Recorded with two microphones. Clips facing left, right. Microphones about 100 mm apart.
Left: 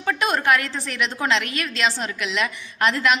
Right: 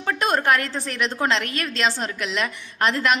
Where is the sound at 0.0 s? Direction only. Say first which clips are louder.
Even; 35° right (ahead or behind).